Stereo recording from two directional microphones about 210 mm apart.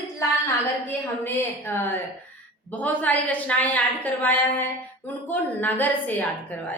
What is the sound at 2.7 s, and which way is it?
A woman's voice, 10° left (ahead or behind).